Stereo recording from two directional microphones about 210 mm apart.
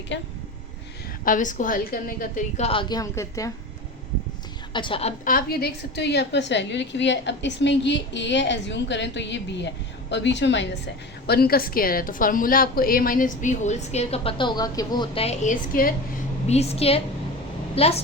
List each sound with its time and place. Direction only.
0.1 s a woman's voice: 55° left (ahead or behind)
1.2 s a woman's voice: 40° left (ahead or behind); by 3.5 s 15° left (ahead or behind)
4.7 s a woman's voice: 25° left (ahead or behind); by 10.7 s 60° left (ahead or behind)
11.3 s a woman's voice: 45° left (ahead or behind)
16.5 s a woman's voice: 30° left (ahead or behind)